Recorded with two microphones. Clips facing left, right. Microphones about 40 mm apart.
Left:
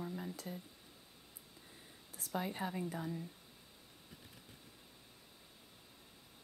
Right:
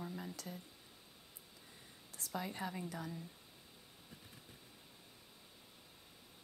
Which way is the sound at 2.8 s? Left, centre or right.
Centre.